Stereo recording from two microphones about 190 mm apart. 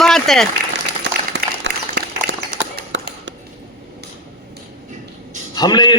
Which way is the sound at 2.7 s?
65° right (ahead or behind).